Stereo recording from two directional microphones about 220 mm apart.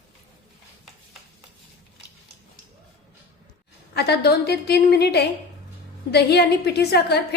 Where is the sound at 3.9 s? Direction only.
45° left (ahead or behind).